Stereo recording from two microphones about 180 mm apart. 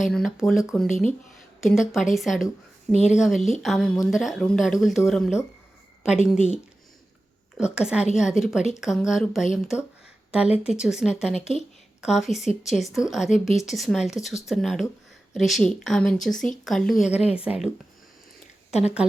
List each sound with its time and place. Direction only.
0.1 s speech: centre (ahead or behind)
2.9 s speech: 40° left (ahead or behind)
3.2 s speech: centre (ahead or behind)